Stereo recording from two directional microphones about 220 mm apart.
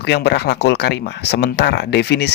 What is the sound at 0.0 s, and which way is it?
Speech, 50° left (ahead or behind).